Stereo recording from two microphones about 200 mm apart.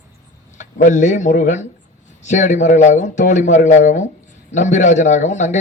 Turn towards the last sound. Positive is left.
turn(degrees=35)  # may be behind; listen again after turning